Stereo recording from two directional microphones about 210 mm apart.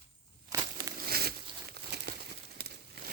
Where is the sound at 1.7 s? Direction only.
50° right (ahead or behind).